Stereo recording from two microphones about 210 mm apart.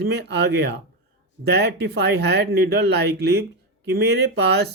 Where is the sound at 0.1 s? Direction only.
55° right (ahead or behind).